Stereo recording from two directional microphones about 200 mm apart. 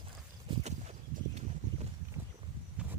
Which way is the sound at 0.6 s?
35° right (ahead or behind).